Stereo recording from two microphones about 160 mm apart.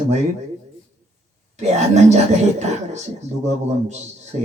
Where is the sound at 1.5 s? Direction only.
45° right (ahead or behind).